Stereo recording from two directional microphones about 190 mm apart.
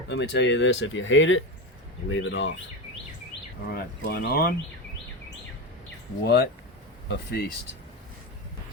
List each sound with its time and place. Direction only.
0.1 s speech: 65° left (ahead or behind)
3.7 s speech: 55° left (ahead or behind)
6.2 s speech: 55° left (ahead or behind)